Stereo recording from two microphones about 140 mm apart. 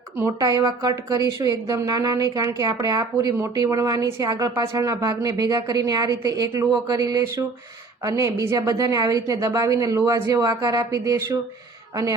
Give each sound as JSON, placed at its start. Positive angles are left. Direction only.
{"t": 0.2, "sound": "speech", "side_deg": -20}